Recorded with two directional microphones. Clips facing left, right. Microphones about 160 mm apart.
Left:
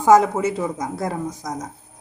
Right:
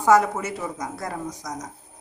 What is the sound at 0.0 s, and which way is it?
A woman's voice, 20° left (ahead or behind).